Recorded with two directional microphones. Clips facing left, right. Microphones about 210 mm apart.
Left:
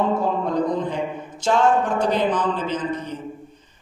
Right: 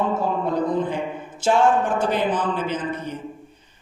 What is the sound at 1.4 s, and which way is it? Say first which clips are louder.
A man's voice: even; 5° right (ahead or behind).